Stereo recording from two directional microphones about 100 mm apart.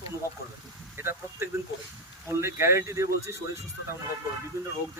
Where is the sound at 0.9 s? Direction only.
25° right (ahead or behind).